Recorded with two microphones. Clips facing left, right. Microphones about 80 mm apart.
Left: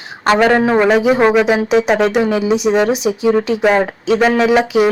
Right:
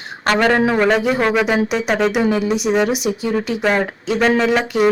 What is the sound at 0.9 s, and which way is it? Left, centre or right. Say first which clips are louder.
Speech: left 5 dB; centre.